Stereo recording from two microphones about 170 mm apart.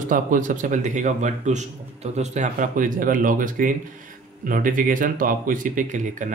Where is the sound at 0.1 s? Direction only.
50° right (ahead or behind).